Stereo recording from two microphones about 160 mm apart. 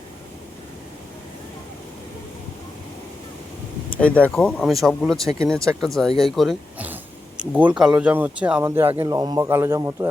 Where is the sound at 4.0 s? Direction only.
10° left (ahead or behind).